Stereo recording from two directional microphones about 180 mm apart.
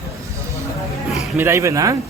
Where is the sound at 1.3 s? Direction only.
15° right (ahead or behind).